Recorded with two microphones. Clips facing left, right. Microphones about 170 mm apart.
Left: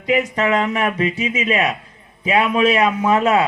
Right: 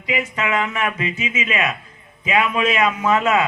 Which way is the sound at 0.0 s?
40° left (ahead or behind).